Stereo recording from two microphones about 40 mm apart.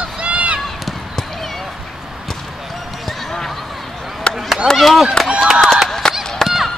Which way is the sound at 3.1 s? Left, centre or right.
Centre.